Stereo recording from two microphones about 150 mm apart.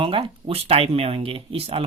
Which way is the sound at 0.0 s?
35° right (ahead or behind).